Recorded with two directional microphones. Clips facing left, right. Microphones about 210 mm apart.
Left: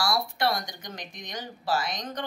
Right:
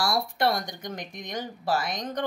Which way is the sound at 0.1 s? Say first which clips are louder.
Right 2 dB; 50° right (ahead or behind).